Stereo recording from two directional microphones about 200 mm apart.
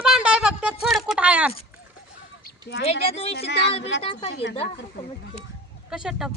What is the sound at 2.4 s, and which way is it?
Fowl, 50° left (ahead or behind).